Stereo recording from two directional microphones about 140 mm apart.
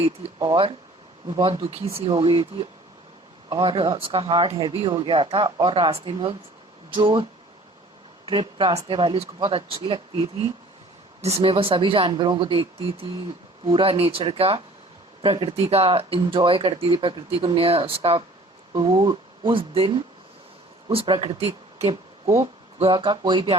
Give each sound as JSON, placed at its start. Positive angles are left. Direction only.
{"t": 0.0, "sound": "speech", "side_deg": -35}
{"t": 8.3, "sound": "speech", "side_deg": -40}